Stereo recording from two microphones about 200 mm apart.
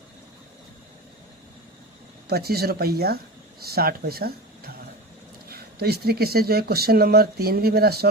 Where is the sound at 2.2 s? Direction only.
50° right (ahead or behind).